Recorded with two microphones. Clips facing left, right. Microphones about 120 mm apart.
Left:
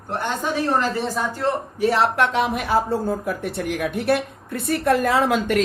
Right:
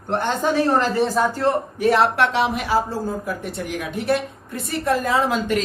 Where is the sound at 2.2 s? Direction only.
45° left (ahead or behind); by 5.6 s 60° left (ahead or behind).